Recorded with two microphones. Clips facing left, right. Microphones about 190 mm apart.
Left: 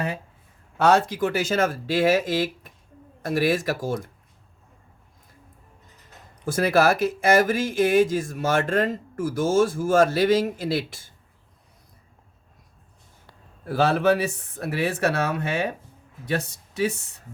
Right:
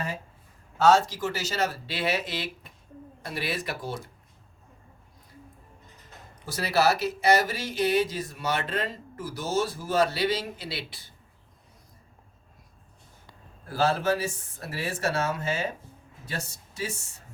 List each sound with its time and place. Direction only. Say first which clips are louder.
0.8 s speech: left 2 dB; 60° left (ahead or behind)
6.4 s speech: left 5 dB; 50° left (ahead or behind)
13.7 s speech: left 5 dB; 65° left (ahead or behind)